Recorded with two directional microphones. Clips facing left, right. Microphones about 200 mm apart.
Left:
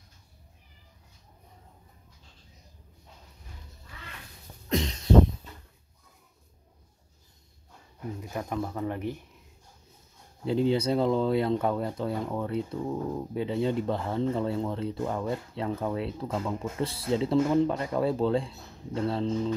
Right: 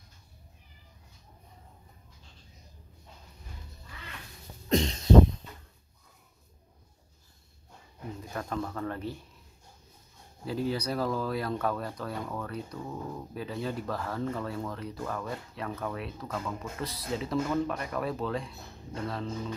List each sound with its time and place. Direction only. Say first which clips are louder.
4.6 s a sound: right 2 dB; 30° right (ahead or behind)
8.2 s speech: left 2 dB; 15° left (ahead or behind)
10.4 s speech: left 6 dB; 25° left (ahead or behind)